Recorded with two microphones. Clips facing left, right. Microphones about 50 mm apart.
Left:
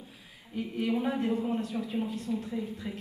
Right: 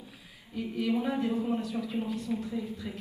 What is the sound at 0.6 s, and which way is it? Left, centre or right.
A woman's voice, left.